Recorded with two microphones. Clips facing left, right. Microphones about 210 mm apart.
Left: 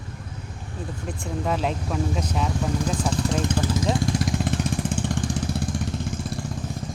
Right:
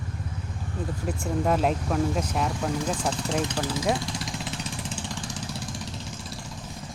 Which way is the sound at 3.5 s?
50° left (ahead or behind).